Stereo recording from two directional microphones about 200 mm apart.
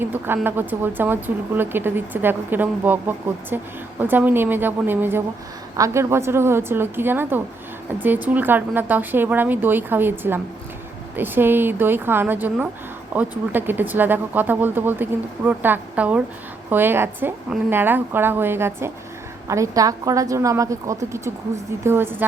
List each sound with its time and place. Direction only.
0.0 s speech: 10° right (ahead or behind)